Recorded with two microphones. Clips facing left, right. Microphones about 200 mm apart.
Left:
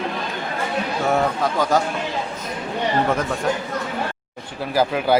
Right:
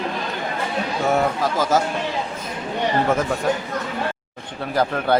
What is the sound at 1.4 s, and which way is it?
Speech, 5° right (ahead or behind).